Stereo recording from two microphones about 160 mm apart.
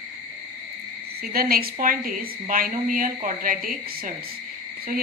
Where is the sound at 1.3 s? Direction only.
70° right (ahead or behind).